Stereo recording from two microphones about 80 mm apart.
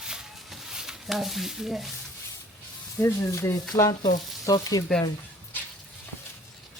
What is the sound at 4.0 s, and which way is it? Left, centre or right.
Frying, left.